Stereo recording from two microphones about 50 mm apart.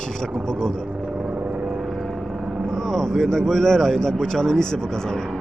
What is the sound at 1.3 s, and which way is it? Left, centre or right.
Vehicle, right.